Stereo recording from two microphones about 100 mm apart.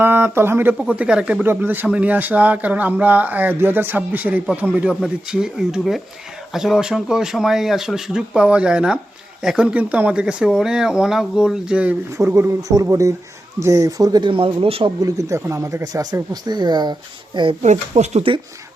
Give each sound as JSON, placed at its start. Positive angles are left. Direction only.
{"t": 0.0, "sound": "speech", "side_deg": -20}
{"t": 0.8, "sound": "speech", "side_deg": -10}
{"t": 1.5, "sound": "speech", "side_deg": -20}
{"t": 4.9, "sound": "speech", "side_deg": -5}
{"t": 12.1, "sound": "speech", "side_deg": -30}
{"t": 14.3, "sound": "speech", "side_deg": -60}
{"t": 15.0, "sound": "speech", "side_deg": -30}
{"t": 17.6, "sound": "speech", "side_deg": -90}